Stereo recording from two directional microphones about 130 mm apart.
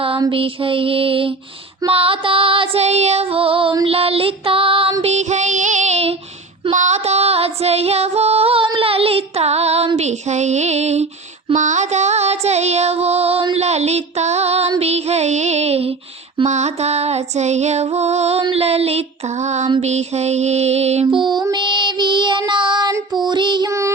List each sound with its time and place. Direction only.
0.3 s music: 45° right (ahead or behind)
5.0 s music: 60° right (ahead or behind)
6.7 s female singing: 60° right (ahead or behind)
11.5 s music: 70° right (ahead or behind)
21.1 s music: 35° right (ahead or behind)
22.9 s child singing: 30° right (ahead or behind)